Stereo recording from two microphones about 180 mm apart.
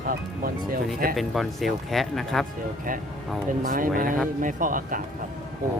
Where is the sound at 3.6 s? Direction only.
50° right (ahead or behind).